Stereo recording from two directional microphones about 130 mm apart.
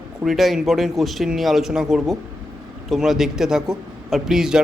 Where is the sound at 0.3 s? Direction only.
Centre (ahead or behind).